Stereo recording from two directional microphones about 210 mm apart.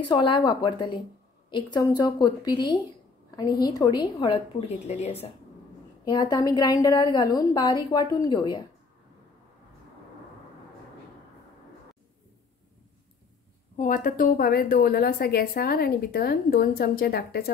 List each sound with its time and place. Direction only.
0.1 s a woman's voice: 20° left (ahead or behind)
6.0 s a woman's voice: 20° left (ahead or behind)
13.7 s a woman's voice: 40° left (ahead or behind)